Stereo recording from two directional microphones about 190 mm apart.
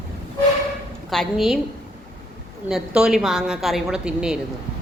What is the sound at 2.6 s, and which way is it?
A woman's voice, 5° right (ahead or behind).